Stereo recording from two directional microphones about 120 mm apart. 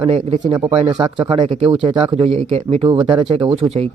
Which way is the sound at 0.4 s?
45° right (ahead or behind).